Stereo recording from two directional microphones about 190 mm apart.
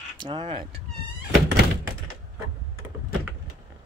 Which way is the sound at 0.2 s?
25° right (ahead or behind).